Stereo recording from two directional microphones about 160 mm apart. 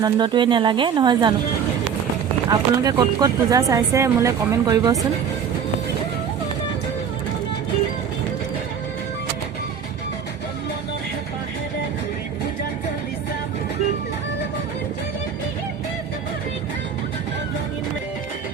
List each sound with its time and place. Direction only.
0.0 s speech: 30° right (ahead or behind)
2.5 s speech: 25° right (ahead or behind)